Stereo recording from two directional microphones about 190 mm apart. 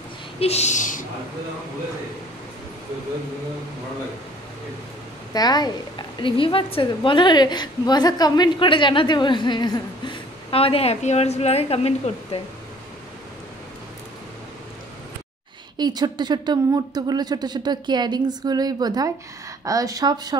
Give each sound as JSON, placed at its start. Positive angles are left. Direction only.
{"t": 0.4, "sound": "a sound", "side_deg": 35}
{"t": 5.3, "sound": "a woman's voice", "side_deg": 20}
{"t": 15.8, "sound": "speech", "side_deg": -20}